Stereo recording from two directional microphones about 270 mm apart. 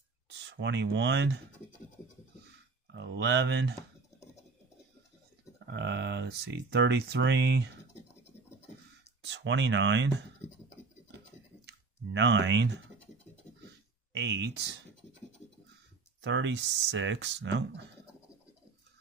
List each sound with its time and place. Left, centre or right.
0.3 s speech: right
2.9 s speech: right
5.7 s speech: right
9.2 s speech: right
11.6 s speech: right
14.1 s speech: right
16.2 s speech: right